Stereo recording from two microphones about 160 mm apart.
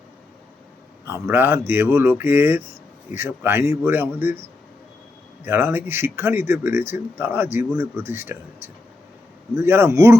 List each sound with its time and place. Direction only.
1.0 s speech: 15° right (ahead or behind)
5.5 s speech: 15° right (ahead or behind)